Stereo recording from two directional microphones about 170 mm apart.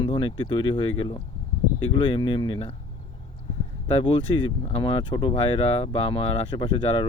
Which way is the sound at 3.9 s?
30° left (ahead or behind).